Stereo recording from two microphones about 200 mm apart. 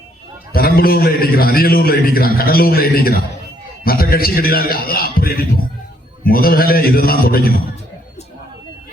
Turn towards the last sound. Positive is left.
turn(degrees=50)  # may be behind; listen again after turning